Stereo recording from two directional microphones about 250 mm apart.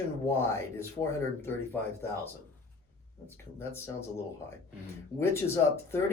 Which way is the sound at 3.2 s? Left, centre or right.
Centre.